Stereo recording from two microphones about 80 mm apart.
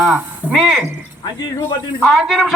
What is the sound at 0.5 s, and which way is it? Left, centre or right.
Speech, centre.